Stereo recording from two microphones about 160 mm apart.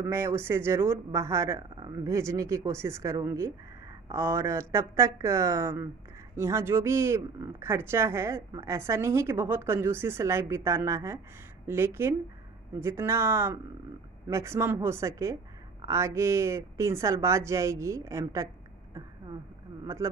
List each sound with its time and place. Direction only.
0.0 s speech: 15° right (ahead or behind)
19.8 s speech: 20° right (ahead or behind)